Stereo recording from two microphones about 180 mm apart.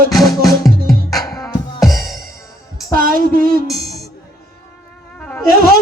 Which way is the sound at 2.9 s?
50° right (ahead or behind).